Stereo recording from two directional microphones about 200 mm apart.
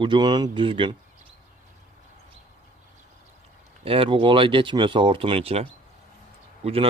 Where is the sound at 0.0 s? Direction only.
25° right (ahead or behind).